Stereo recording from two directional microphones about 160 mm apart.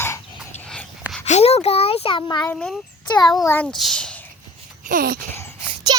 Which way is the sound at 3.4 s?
15° left (ahead or behind).